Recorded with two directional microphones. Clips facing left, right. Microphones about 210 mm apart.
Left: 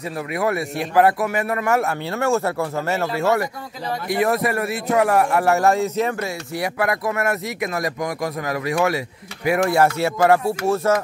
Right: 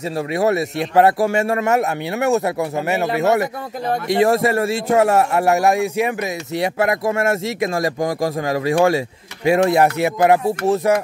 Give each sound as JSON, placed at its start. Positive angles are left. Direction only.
{"t": 0.3, "sound": "a man's voice", "side_deg": -25}